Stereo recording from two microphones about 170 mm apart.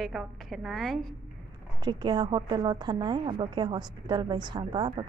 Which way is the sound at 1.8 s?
25° right (ahead or behind).